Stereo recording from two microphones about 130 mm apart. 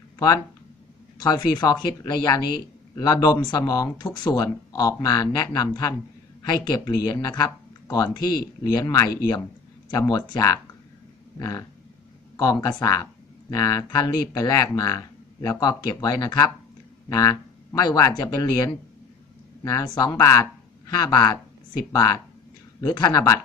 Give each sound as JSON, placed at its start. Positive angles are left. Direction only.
{"t": 1.2, "sound": "speech", "side_deg": 35}